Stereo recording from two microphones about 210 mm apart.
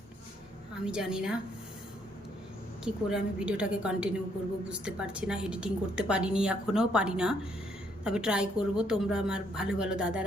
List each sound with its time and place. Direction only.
0.9 s a woman's voice: 5° right (ahead or behind)
2.8 s a woman's voice: 5° right (ahead or behind)